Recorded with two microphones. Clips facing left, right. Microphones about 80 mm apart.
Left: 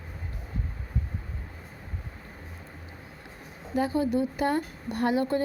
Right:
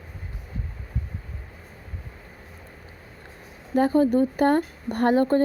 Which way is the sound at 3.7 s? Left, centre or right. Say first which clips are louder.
Right 6 dB; right.